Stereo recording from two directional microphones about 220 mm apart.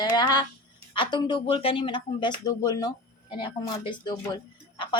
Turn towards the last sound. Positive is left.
turn(degrees=20)  # may be behind; listen again after turning